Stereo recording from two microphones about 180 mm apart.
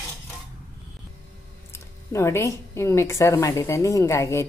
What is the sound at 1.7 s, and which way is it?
Speech, 15° left (ahead or behind).